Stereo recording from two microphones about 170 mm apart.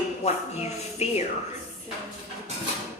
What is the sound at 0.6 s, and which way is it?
Speech, 40° left (ahead or behind).